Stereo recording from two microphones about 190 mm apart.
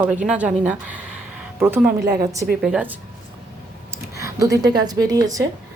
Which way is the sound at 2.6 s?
5° right (ahead or behind).